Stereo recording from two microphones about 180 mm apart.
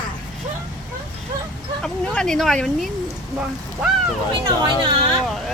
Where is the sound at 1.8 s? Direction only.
5° left (ahead or behind).